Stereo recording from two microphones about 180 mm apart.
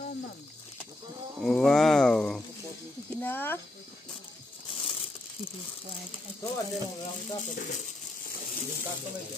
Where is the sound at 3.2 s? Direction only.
10° left (ahead or behind).